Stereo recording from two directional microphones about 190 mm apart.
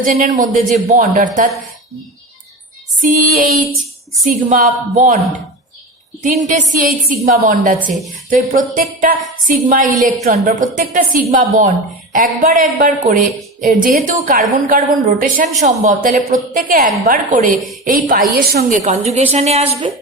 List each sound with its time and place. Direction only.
0.0 s a woman's voice: 45° right (ahead or behind)
3.0 s a woman's voice: 45° right (ahead or behind)
6.2 s a woman's voice: 40° right (ahead or behind)